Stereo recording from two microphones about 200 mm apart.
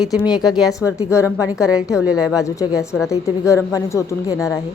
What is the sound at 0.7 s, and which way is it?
Speech, 15° left (ahead or behind).